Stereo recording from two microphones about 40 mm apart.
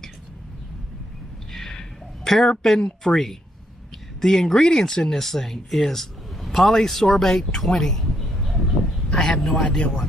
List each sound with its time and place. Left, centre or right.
1.5 s a sound: centre
2.6 s speech: centre
9.1 s speech: centre